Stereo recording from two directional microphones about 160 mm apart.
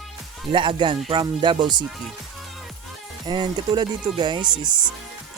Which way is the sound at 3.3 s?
30° right (ahead or behind).